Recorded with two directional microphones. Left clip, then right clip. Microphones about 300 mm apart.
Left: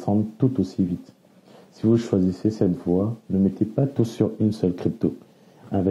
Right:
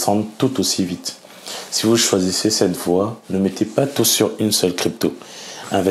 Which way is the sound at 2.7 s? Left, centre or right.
Centre.